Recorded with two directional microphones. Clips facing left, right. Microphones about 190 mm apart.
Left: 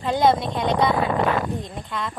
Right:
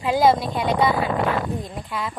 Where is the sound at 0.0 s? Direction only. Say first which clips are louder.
Right 1 dB; 5° right (ahead or behind).